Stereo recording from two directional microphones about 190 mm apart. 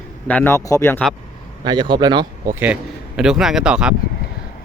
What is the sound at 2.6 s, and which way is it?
A man's voice, 5° right (ahead or behind).